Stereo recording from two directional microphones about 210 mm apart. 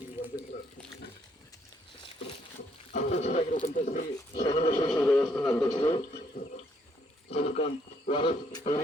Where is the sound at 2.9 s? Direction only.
30° left (ahead or behind).